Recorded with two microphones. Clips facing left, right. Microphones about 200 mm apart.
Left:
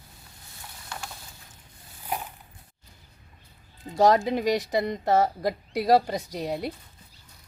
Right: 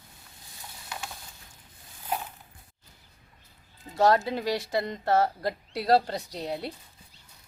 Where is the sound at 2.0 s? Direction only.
10° left (ahead or behind).